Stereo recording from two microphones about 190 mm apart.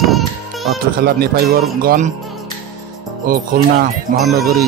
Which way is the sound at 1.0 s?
55° right (ahead or behind).